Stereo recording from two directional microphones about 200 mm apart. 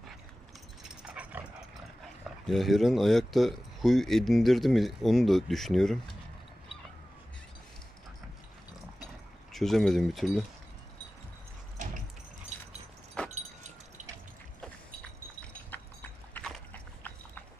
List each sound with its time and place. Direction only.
1.0 s dog: 5° right (ahead or behind)
2.4 s speech: centre (ahead or behind)
9.5 s speech: centre (ahead or behind)
13.3 s vehicle: 35° right (ahead or behind)
15.7 s horse: 10° left (ahead or behind)